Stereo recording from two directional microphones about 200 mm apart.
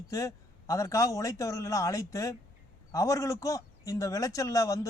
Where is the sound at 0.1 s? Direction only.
15° left (ahead or behind).